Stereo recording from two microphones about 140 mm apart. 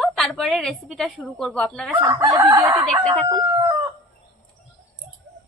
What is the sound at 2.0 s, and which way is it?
Speech, 25° right (ahead or behind).